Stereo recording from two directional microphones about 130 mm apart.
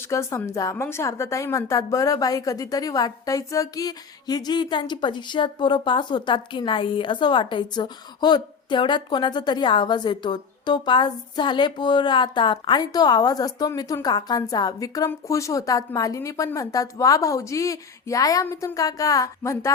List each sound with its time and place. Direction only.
0.1 s a woman's voice: 20° left (ahead or behind)